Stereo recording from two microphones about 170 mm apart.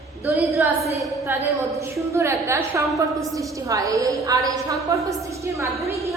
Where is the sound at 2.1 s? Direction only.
15° right (ahead or behind).